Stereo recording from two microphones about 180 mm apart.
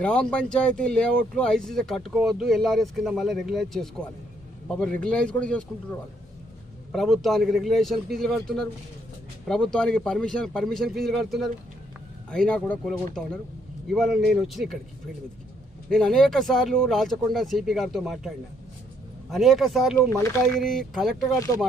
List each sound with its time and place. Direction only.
0.0 s speech: 5° left (ahead or behind)
10.8 s speech: 60° right (ahead or behind)
11.2 s speech: centre (ahead or behind)
15.9 s speech: 5° left (ahead or behind)
19.3 s speech: centre (ahead or behind)
20.0 s speech: 15° left (ahead or behind)
20.4 s speech: centre (ahead or behind)
21.3 s speech: 20° left (ahead or behind)